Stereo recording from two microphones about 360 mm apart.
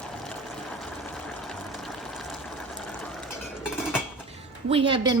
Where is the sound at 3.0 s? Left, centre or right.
Centre.